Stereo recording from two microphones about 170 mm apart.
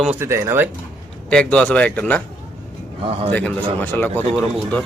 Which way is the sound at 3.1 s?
35° right (ahead or behind).